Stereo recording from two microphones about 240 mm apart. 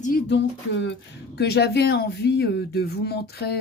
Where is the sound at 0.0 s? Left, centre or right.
Left.